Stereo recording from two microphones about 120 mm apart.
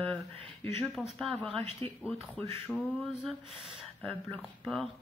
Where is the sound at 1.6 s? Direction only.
55° right (ahead or behind).